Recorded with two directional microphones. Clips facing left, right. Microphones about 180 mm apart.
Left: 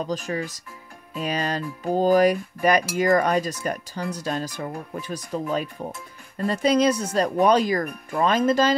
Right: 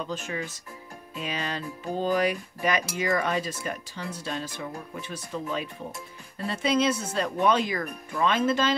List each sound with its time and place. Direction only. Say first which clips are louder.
0.0 s speech: left 5 dB; 40° left (ahead or behind)